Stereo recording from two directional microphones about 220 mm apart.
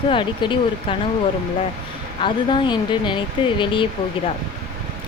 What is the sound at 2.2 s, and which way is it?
Speech, 20° left (ahead or behind).